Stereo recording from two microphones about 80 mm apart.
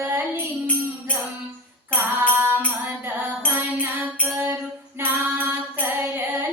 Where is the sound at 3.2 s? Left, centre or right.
Right.